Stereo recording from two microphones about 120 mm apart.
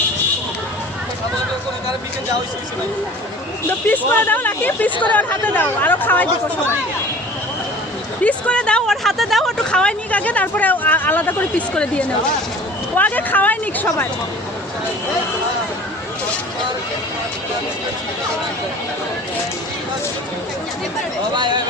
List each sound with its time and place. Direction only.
3.7 s speech: 15° left (ahead or behind)
8.2 s speech: 10° left (ahead or behind)
21.3 s speech: 40° right (ahead or behind)